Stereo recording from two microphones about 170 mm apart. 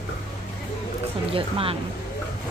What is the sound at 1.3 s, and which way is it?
Music, 30° right (ahead or behind).